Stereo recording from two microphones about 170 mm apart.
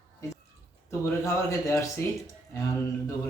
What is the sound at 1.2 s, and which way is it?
Speech, 15° left (ahead or behind).